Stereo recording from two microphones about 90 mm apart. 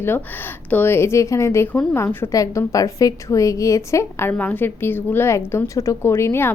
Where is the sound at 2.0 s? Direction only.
35° left (ahead or behind).